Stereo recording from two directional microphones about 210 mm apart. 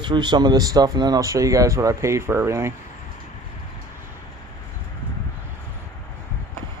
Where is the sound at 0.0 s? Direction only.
20° right (ahead or behind).